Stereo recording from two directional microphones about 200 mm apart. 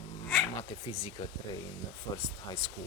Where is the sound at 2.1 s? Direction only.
20° left (ahead or behind).